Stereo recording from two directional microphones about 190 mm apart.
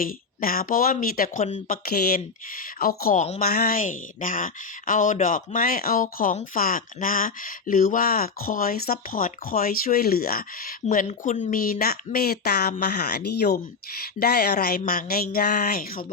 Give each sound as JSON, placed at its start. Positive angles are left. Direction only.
{"t": 0.0, "sound": "speech", "side_deg": 50}
{"t": 3.5, "sound": "speech", "side_deg": 50}